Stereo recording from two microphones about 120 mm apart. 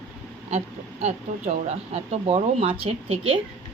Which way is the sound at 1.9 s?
55° right (ahead or behind).